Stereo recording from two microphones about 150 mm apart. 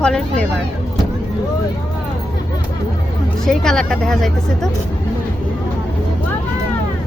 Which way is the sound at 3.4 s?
5° left (ahead or behind).